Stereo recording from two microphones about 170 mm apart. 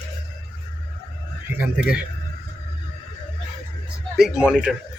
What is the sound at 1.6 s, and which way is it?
Speech, 5° right (ahead or behind).